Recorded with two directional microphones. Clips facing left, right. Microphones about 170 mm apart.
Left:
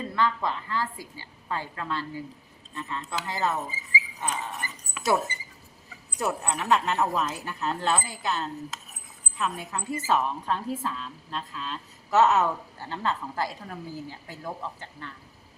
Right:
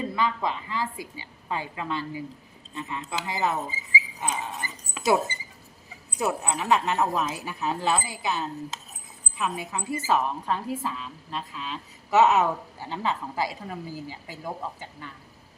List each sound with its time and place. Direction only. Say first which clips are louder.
0.2 s a woman's voice: left 2 dB; 15° right (ahead or behind)
6.1 s a woman's voice: right 2 dB; 5° right (ahead or behind)